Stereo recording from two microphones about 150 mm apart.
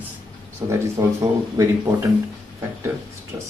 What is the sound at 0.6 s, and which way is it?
Speech, 20° right (ahead or behind).